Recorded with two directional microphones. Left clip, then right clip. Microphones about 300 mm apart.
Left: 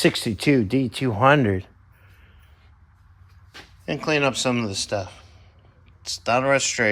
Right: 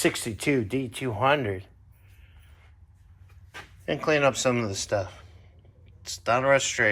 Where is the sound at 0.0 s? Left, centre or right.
Left.